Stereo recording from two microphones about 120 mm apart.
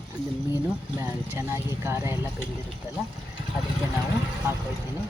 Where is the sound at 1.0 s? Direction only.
20° right (ahead or behind).